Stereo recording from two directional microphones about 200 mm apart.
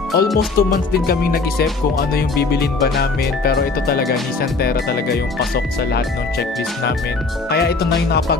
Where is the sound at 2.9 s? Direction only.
50° left (ahead or behind).